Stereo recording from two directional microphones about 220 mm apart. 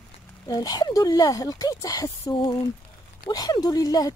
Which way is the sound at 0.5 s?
15° left (ahead or behind).